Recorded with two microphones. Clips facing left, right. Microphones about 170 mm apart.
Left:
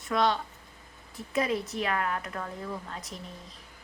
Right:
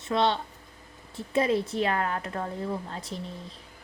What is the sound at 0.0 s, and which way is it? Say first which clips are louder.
Speech: right 1 dB; 25° right (ahead or behind).